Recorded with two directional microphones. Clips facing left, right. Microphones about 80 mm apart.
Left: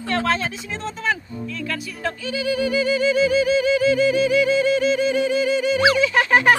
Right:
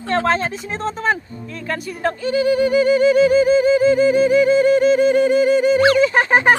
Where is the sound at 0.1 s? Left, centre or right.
Right.